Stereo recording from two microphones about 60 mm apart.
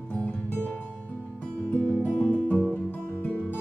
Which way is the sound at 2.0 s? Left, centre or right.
Left.